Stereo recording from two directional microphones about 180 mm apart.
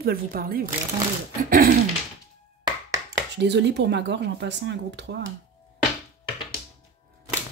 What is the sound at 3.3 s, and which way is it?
Speech, 75° right (ahead or behind).